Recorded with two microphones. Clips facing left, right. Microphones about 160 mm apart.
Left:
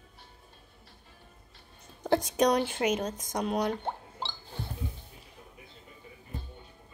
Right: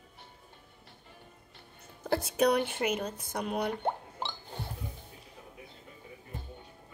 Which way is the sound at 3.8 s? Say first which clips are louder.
Right 3 dB; 55° right (ahead or behind).